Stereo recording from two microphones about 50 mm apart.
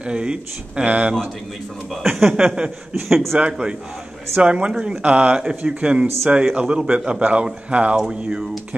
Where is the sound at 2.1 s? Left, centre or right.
Centre.